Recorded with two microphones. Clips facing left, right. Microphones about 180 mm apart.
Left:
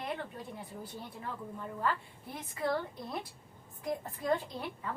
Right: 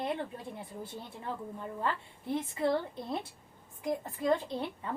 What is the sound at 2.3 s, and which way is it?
A woman's voice, 25° right (ahead or behind).